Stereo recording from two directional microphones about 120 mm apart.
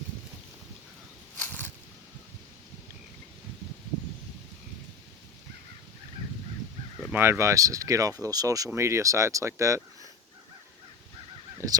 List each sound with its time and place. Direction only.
1.4 s a sound: 15° left (ahead or behind)
7.1 s speech: 20° right (ahead or behind)
11.5 s goose: 30° right (ahead or behind)